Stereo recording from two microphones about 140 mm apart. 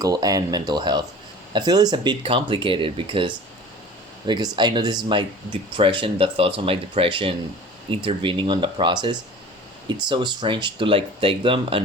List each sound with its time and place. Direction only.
0.0 s speech: 25° right (ahead or behind)
4.5 s speech: 35° right (ahead or behind)